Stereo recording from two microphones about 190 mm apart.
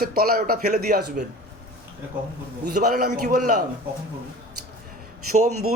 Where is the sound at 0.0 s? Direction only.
50° right (ahead or behind).